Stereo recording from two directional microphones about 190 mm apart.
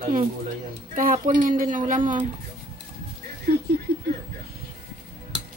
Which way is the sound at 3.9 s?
60° right (ahead or behind).